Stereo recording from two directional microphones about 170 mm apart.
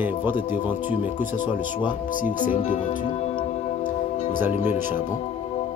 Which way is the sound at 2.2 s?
50° left (ahead or behind).